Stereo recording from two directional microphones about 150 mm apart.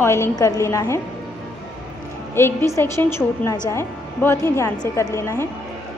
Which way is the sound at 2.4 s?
15° left (ahead or behind).